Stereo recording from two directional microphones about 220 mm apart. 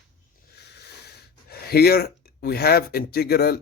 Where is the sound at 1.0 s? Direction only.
45° left (ahead or behind).